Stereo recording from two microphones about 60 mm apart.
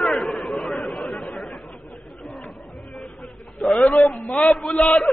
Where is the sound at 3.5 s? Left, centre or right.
Centre.